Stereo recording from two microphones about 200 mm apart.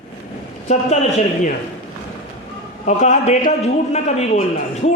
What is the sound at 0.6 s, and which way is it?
Speech, 35° left (ahead or behind).